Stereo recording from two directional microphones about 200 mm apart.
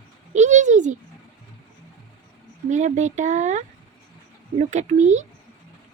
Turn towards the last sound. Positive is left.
turn(degrees=-35)  # may be behind; listen again after turning